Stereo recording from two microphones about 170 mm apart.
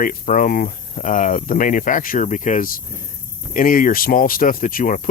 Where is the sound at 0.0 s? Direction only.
55° left (ahead or behind).